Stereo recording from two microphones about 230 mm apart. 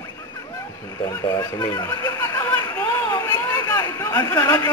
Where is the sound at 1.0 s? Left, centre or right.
Centre.